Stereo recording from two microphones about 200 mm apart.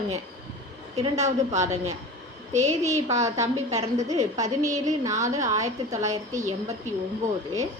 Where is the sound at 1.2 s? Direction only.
35° right (ahead or behind).